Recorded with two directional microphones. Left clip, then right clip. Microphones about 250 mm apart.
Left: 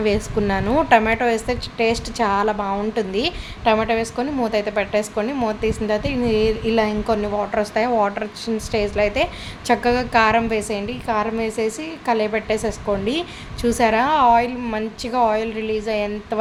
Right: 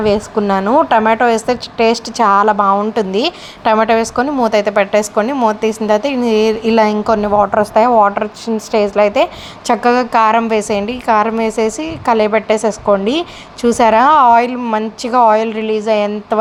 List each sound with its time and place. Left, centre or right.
0.0 s a woman's voice: centre